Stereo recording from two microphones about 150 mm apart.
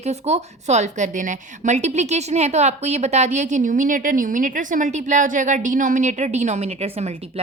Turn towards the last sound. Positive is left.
turn(degrees=-45)  # may be behind; listen again after turning